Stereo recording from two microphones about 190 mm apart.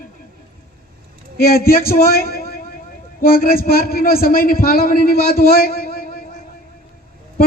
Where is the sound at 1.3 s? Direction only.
50° left (ahead or behind).